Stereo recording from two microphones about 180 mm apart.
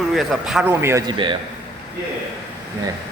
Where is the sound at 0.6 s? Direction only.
15° right (ahead or behind).